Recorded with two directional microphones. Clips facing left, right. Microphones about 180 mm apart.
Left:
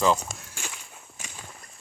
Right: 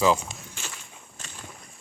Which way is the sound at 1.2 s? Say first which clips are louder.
Left 1 dB; 10° left (ahead or behind).